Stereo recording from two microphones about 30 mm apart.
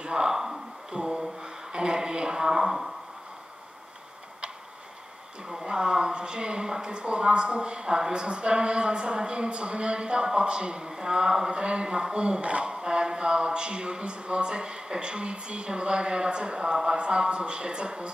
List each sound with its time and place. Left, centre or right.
0.0 s speech: right
0.3 s a sound: centre
0.9 s gasp: right
1.4 s a sound: right
5.6 s a woman's voice: right
10.9 s a woman's voice: right
11.5 s speech: right
12.6 s speech: right